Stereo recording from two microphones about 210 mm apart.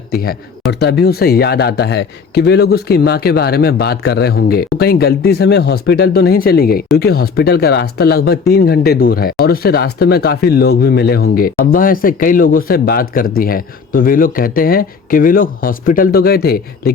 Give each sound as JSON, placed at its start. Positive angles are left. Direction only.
{"t": 0.1, "sound": "speech", "side_deg": 45}